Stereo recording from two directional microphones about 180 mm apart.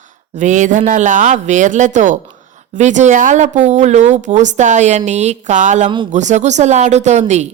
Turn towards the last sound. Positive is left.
turn(degrees=-40)  # may be behind; listen again after turning